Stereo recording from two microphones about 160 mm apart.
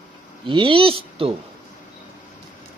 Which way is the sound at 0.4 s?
30° right (ahead or behind).